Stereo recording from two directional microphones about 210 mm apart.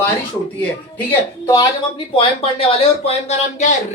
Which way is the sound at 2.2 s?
25° left (ahead or behind).